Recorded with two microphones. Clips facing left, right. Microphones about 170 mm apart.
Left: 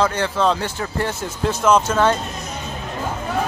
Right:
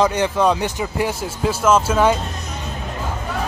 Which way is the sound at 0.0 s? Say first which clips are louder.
Right 2 dB; 15° right (ahead or behind).